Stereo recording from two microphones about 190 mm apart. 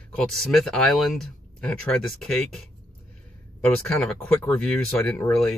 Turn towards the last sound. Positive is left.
turn(degrees=5)  # may be behind; listen again after turning